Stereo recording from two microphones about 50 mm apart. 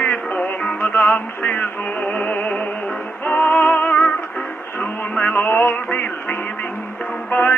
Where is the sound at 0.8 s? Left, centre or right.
Left.